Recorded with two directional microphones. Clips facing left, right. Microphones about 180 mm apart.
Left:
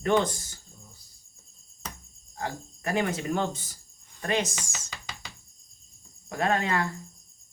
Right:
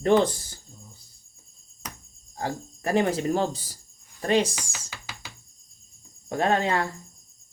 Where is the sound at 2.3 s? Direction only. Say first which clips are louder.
Right 4 dB; 35° right (ahead or behind).